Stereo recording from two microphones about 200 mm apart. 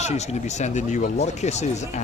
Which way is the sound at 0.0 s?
35° left (ahead or behind).